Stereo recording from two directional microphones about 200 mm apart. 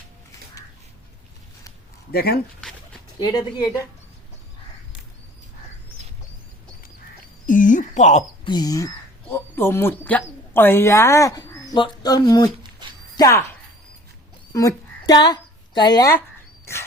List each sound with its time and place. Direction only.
2.1 s speech: 50° left (ahead or behind)
2.6 s dog: 5° left (ahead or behind)
3.2 s speech: 20° left (ahead or behind)
7.4 s a sound: 40° left (ahead or behind)
8.4 s speech: 20° left (ahead or behind)
12.8 s a sound: 20° right (ahead or behind)
13.1 s speech: 15° left (ahead or behind)
14.5 s a woman's voice: 20° left (ahead or behind)